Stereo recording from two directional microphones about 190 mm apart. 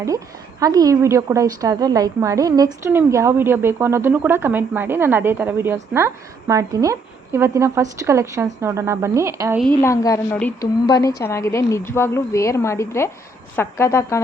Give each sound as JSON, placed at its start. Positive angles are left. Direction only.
{"t": 0.6, "sound": "a woman's voice", "side_deg": -20}
{"t": 9.8, "sound": "a woman's voice", "side_deg": 15}